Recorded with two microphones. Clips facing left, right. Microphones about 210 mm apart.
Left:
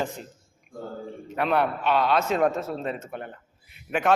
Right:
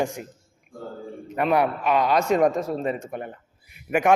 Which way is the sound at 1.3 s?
5° right (ahead or behind).